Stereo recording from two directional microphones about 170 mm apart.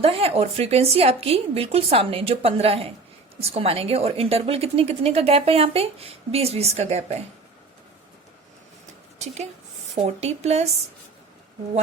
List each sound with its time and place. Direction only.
0.0 s a woman's voice: 35° right (ahead or behind)
9.1 s a woman's voice: 40° right (ahead or behind)